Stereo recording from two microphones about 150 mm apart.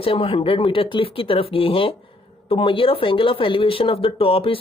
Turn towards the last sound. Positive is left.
turn(degrees=40)  # may be behind; listen again after turning